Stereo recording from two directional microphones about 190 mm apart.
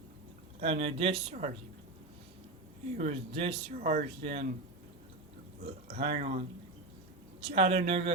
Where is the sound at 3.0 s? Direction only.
30° right (ahead or behind).